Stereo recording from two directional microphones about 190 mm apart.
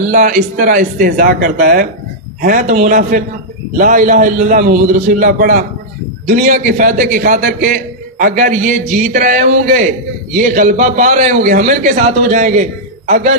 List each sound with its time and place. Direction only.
0.0 s a man's voice: 45° right (ahead or behind)